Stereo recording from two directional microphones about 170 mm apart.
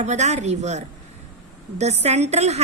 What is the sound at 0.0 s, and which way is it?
A woman's voice, 40° right (ahead or behind).